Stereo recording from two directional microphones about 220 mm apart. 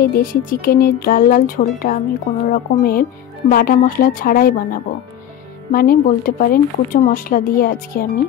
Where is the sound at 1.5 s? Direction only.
40° left (ahead or behind).